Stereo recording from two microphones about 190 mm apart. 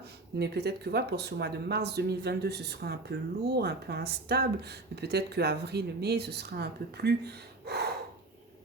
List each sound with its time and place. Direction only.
0.3 s speech: 60° right (ahead or behind)